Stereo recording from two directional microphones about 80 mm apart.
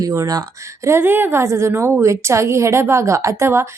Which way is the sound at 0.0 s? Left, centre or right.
Right.